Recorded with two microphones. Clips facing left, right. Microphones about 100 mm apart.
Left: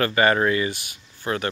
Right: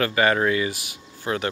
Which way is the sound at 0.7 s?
90° right.